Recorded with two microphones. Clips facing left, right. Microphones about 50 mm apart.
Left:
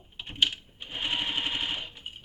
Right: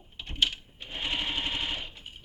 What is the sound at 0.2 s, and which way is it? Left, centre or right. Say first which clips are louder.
Sewing machine: left 1 dB; centre.